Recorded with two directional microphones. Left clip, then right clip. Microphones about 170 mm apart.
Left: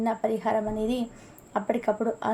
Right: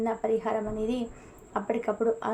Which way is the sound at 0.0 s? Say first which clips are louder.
Left 1 dB; 40° left (ahead or behind).